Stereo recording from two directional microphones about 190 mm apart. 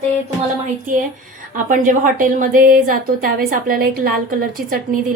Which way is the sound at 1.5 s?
45° right (ahead or behind).